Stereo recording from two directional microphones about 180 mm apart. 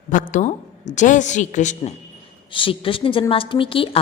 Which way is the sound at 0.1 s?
45° left (ahead or behind).